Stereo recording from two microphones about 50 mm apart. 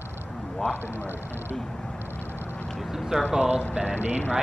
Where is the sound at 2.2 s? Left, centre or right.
Right.